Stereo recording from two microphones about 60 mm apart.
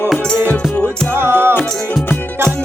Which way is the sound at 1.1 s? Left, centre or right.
Right.